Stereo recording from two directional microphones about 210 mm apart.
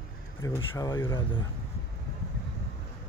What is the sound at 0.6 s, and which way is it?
Speech, 25° left (ahead or behind).